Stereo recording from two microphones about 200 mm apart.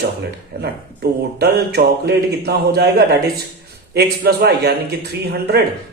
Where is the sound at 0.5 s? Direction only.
50° right (ahead or behind).